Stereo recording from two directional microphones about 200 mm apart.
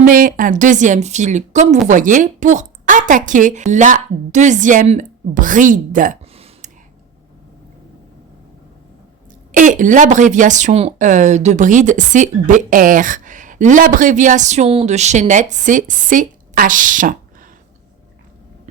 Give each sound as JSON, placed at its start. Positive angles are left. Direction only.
{"t": 0.0, "sound": "speech", "side_deg": -45}
{"t": 9.5, "sound": "speech", "side_deg": -40}